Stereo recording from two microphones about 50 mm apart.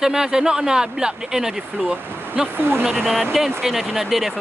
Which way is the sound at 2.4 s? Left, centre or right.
Right.